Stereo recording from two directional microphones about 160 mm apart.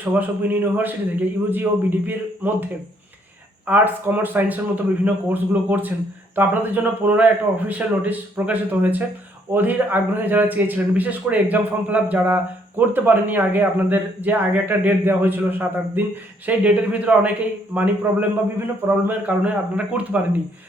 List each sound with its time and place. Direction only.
0.0 s a man's voice: 10° right (ahead or behind)
3.7 s a man's voice: 10° right (ahead or behind)